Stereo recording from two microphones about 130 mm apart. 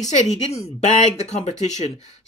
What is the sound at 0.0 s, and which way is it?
Speech, 65° left (ahead or behind).